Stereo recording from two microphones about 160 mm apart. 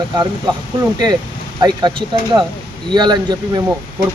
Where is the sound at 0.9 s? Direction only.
25° right (ahead or behind).